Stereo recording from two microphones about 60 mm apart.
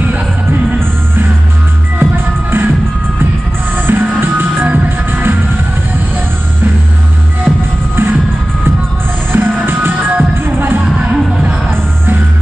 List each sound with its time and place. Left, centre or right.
0.1 s music: right
3.7 s music: right
7.9 s music: right
9.3 s music: right
11.1 s music: centre